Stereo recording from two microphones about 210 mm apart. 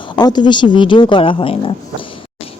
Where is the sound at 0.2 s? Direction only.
20° left (ahead or behind).